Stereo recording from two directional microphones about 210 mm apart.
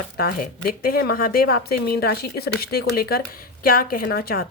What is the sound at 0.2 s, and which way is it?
A woman's voice, 45° left (ahead or behind).